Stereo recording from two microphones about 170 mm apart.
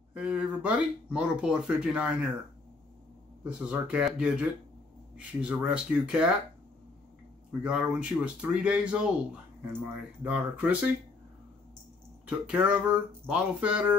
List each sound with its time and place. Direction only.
0.1 s speech: 5° right (ahead or behind)
3.4 s speech: 5° right (ahead or behind)
7.6 s speech: 5° right (ahead or behind)
10.2 s speech: 10° right (ahead or behind)
12.3 s speech: 5° right (ahead or behind)